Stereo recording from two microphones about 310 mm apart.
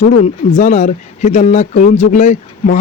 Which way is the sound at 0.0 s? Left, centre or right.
Left.